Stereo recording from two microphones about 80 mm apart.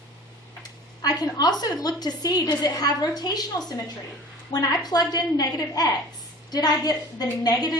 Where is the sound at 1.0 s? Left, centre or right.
Left.